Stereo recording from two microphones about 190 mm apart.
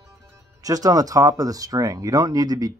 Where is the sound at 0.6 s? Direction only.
20° right (ahead or behind).